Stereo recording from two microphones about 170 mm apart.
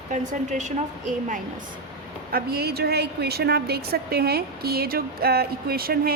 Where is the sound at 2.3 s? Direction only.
65° right (ahead or behind).